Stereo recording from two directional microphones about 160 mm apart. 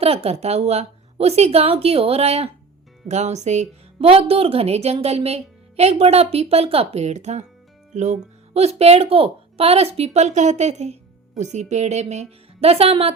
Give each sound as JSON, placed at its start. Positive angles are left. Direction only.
{"t": 0.0, "sound": "a woman's voice", "side_deg": -40}